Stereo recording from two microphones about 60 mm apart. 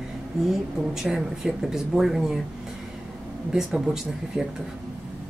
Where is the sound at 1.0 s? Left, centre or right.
Centre.